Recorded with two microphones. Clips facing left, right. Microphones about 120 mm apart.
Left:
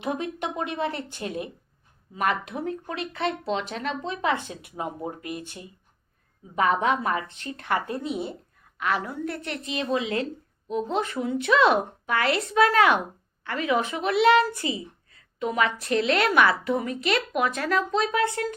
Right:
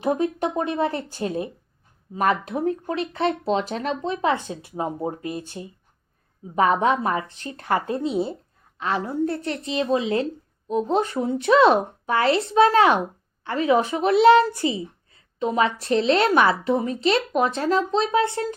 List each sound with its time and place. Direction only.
0.0 s speech: 35° right (ahead or behind)